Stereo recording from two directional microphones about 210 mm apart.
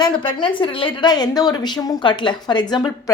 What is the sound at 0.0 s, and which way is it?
A woman's voice, 20° left (ahead or behind).